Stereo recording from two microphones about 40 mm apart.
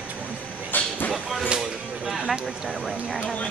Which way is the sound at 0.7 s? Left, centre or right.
Left.